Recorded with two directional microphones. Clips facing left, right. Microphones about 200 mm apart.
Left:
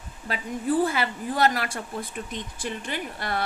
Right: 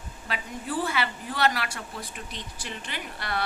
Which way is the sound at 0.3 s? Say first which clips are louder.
Left 7 dB; 45° left (ahead or behind).